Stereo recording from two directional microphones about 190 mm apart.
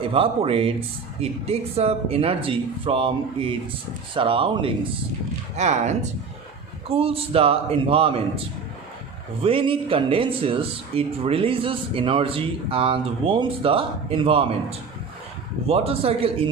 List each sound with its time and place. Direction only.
0.0 s speech: 30° right (ahead or behind)
5.5 s speech: 40° right (ahead or behind)
9.4 s speech: 30° right (ahead or behind)